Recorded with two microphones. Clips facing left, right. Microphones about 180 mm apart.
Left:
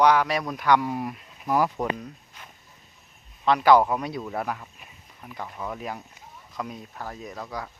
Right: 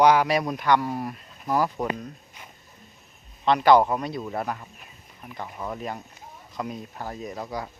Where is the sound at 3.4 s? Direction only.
5° left (ahead or behind).